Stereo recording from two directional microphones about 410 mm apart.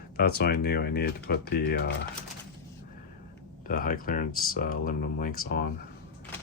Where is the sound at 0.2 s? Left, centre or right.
Left.